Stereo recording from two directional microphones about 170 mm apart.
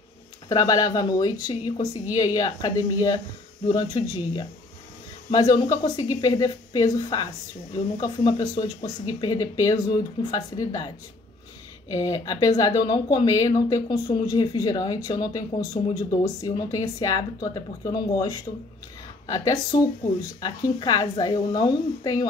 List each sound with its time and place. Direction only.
0.5 s speech: 20° left (ahead or behind)
11.9 s speech: 25° left (ahead or behind)